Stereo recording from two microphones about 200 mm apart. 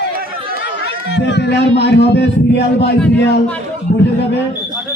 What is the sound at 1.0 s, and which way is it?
Speech, 60° left (ahead or behind).